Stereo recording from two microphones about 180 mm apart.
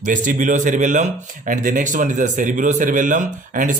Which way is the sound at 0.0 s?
45° right (ahead or behind).